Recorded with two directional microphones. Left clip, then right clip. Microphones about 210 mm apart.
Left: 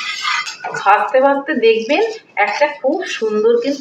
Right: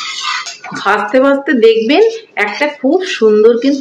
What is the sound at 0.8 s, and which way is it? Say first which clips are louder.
Speech: right 1 dB; 55° right (ahead or behind).